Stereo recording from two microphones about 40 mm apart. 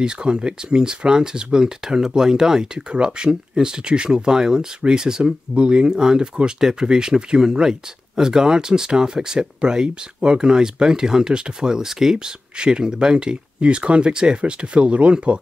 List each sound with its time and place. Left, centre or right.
0.0 s speech: right